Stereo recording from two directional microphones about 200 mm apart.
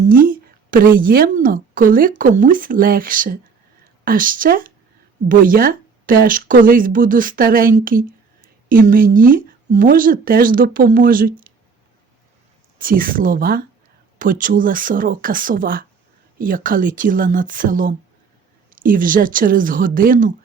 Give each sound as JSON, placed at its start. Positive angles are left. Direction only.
{"t": 0.0, "sound": "a woman's voice", "side_deg": -45}
{"t": 12.8, "sound": "speech", "side_deg": -45}